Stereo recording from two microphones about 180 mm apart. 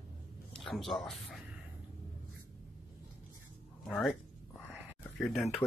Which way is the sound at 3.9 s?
5° left (ahead or behind).